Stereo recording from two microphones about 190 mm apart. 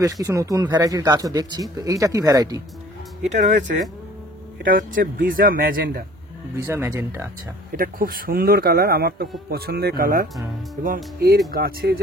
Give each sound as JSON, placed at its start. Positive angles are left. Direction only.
{"t": 0.0, "sound": "speech", "side_deg": -15}
{"t": 3.3, "sound": "a man's voice", "side_deg": -40}
{"t": 6.5, "sound": "speech", "side_deg": -15}
{"t": 7.7, "sound": "a man's voice", "side_deg": -50}